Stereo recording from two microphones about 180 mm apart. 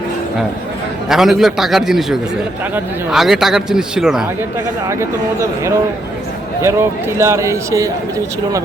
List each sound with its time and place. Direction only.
1.0 s speech: centre (ahead or behind)
4.9 s a man's voice: 15° right (ahead or behind)